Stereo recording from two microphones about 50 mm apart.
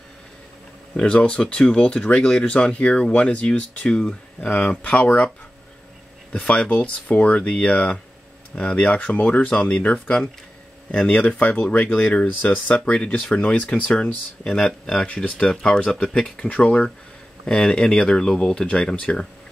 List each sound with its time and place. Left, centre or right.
0.9 s speech: left
6.3 s speech: left
11.1 s speech: left; by 19.2 s centre